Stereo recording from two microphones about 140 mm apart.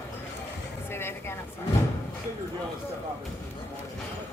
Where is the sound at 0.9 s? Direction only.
15° left (ahead or behind).